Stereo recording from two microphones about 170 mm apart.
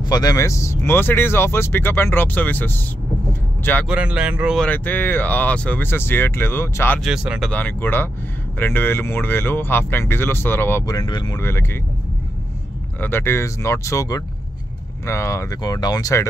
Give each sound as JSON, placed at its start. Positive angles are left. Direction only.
{"t": 0.0, "sound": "speech", "side_deg": 20}
{"t": 3.9, "sound": "speech", "side_deg": -5}
{"t": 4.6, "sound": "speech", "side_deg": 10}
{"t": 7.0, "sound": "speech", "side_deg": -5}
{"t": 11.3, "sound": "speech", "side_deg": 15}
{"t": 13.0, "sound": "speech", "side_deg": 15}